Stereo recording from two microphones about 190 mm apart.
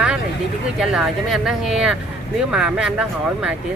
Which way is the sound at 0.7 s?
Centre (ahead or behind).